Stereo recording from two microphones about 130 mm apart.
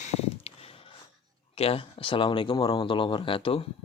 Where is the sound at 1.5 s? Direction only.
50° left (ahead or behind).